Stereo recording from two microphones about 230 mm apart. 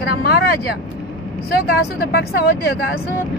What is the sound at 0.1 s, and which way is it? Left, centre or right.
Speech, left.